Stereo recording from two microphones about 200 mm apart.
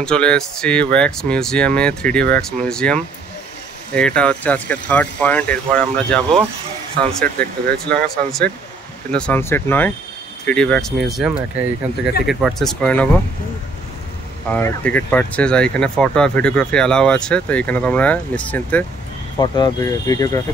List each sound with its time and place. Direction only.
0.0 s speech: 5° left (ahead or behind)
14.5 s speech: 5° left (ahead or behind)
19.3 s speech: 20° left (ahead or behind)